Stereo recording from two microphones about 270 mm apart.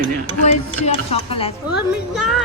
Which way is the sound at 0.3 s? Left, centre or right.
Left.